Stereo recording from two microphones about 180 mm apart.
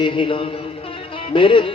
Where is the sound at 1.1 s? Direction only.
30° left (ahead or behind).